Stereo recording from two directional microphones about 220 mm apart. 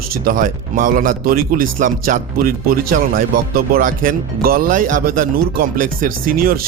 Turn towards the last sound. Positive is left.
turn(degrees=-40)  # may be behind; listen again after turning